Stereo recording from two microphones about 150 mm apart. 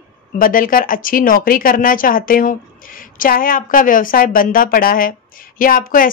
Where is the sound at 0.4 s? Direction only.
65° left (ahead or behind).